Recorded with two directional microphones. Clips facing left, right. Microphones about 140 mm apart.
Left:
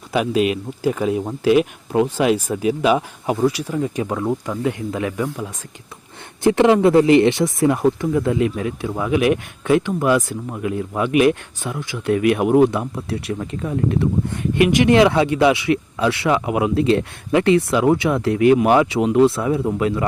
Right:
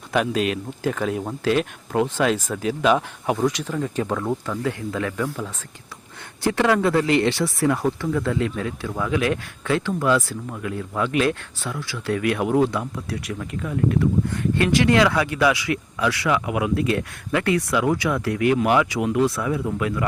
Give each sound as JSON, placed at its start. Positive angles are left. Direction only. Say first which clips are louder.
{"t": 0.1, "sound": "speech", "louder": "left 3 dB", "side_deg": 5}